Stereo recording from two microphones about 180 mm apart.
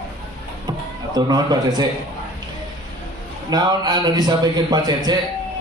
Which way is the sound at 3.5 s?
20° right (ahead or behind).